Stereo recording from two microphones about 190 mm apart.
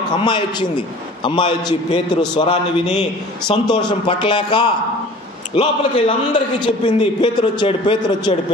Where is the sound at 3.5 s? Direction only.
20° left (ahead or behind).